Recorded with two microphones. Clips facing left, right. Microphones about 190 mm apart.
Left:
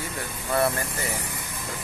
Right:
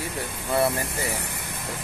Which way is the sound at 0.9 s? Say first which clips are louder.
Right 1 dB; 70° right (ahead or behind).